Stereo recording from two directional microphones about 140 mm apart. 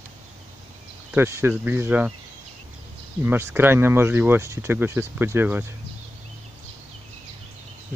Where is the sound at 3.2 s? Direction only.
15° right (ahead or behind).